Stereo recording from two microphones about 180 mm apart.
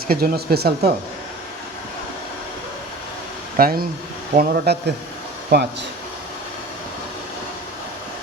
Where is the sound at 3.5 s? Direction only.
55° right (ahead or behind).